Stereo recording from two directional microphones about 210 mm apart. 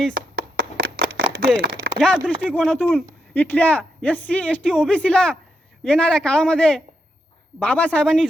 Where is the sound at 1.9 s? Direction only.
5° left (ahead or behind).